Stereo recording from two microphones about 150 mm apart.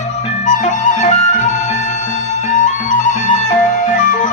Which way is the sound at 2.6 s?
55° left (ahead or behind).